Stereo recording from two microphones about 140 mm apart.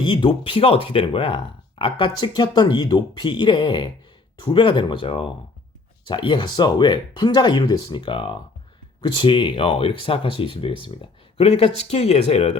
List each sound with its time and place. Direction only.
0.0 s speech: 35° left (ahead or behind)